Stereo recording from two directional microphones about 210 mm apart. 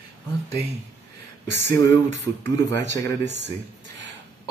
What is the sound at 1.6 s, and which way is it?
Speech, 15° left (ahead or behind).